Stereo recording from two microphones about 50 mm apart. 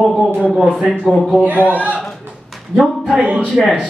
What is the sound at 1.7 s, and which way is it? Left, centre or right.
Speech, right.